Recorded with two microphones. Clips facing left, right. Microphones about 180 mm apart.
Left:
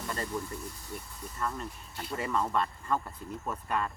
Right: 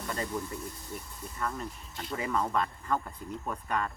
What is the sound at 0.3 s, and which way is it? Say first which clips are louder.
Speech: right 1 dB; 5° right (ahead or behind).